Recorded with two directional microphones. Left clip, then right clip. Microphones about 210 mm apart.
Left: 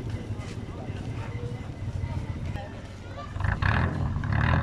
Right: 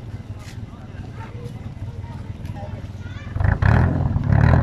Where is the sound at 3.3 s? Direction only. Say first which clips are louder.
Right 5 dB; 30° right (ahead or behind).